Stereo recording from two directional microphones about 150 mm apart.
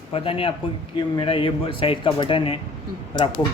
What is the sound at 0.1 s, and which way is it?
Speech, 40° left (ahead or behind).